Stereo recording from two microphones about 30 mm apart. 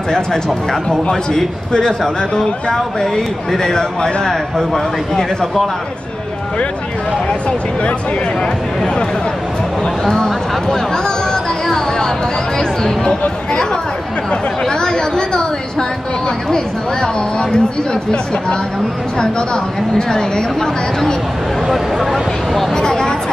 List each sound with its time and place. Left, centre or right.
1.7 s speech: left
10.1 s speech: left
11.6 s music: left
14.3 s chatter: left
16.4 s speech: left
19.1 s speech: left
21.6 s speech: centre
22.8 s speech: left